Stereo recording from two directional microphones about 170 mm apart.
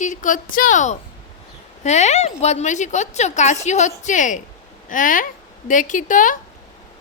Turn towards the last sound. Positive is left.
turn(degrees=50)  # may be behind; listen again after turning